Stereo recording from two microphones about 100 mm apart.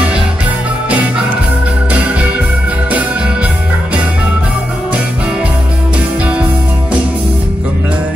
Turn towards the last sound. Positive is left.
turn(degrees=-15)  # may be behind; listen again after turning